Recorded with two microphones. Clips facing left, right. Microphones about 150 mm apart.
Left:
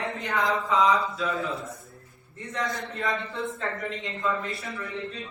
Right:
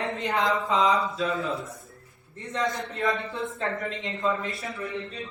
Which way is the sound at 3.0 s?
Centre (ahead or behind).